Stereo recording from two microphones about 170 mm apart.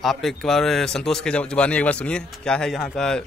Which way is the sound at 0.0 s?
Centre (ahead or behind).